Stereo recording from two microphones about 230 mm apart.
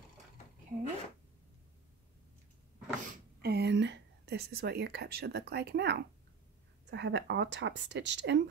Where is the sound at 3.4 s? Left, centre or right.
Right.